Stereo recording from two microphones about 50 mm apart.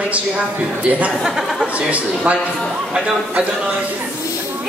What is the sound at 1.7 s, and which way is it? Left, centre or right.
Speech, right.